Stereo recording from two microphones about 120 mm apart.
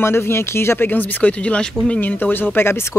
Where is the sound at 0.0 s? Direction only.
20° left (ahead or behind).